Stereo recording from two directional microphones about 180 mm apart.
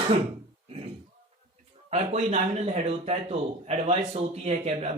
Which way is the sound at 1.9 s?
40° right (ahead or behind).